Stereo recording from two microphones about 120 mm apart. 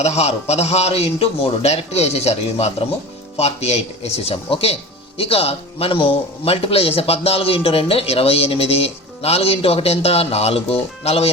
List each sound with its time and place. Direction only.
0.0 s speech: 65° left (ahead or behind)